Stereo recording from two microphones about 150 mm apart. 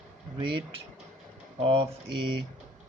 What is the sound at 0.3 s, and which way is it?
Speech, 35° right (ahead or behind).